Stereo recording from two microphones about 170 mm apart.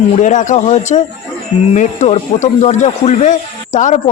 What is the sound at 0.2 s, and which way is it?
Speech, 45° left (ahead or behind).